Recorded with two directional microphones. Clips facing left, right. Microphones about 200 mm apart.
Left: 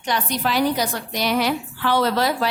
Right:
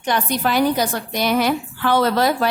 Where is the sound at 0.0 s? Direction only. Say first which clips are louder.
Right 3 dB; 50° right (ahead or behind).